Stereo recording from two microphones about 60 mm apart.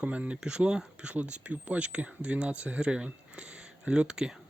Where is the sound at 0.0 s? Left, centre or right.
Right.